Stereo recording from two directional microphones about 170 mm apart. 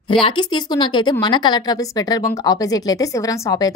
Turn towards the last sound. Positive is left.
turn(degrees=20)  # may be behind; listen again after turning